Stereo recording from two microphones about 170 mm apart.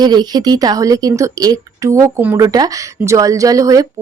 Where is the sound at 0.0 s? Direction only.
25° right (ahead or behind).